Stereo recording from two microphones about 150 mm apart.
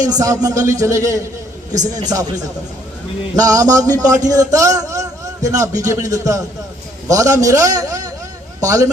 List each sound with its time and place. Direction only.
0.0 s a man's voice: 25° right (ahead or behind)